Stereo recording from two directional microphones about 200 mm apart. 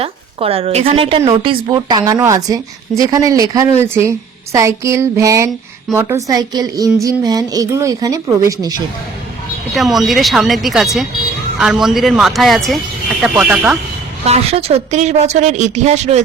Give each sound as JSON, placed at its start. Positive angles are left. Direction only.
{"t": 0.0, "sound": "a woman's voice", "side_deg": -30}
{"t": 9.7, "sound": "speech", "side_deg": 0}
{"t": 14.3, "sound": "a woman's voice", "side_deg": -30}